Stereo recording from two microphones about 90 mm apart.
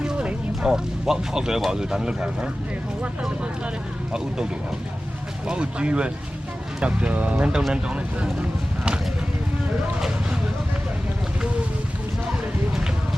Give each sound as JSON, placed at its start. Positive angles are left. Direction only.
{"t": 0.0, "sound": "speech", "side_deg": -10}
{"t": 5.5, "sound": "speech", "side_deg": -10}